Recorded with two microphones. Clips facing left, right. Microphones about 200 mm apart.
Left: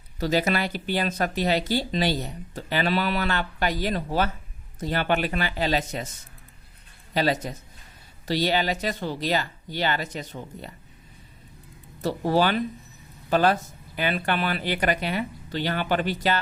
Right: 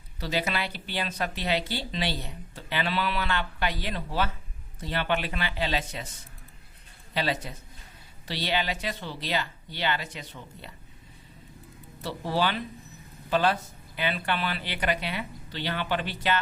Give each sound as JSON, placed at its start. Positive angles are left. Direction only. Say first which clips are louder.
{"t": 0.2, "sound": "speech", "louder": "left 6 dB", "side_deg": 45}
{"t": 7.1, "sound": "speech", "louder": "left 5 dB", "side_deg": 45}
{"t": 12.0, "sound": "speech", "louder": "left 6 dB", "side_deg": 45}